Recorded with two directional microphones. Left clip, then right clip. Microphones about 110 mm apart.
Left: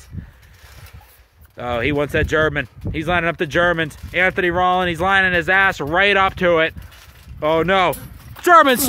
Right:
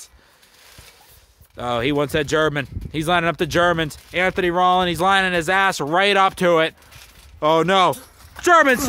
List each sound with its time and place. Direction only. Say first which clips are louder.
1.6 s speech: left 1 dB; 30° right (ahead or behind)